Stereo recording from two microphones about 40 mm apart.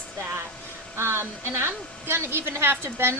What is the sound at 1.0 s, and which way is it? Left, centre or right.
A woman's voice, right.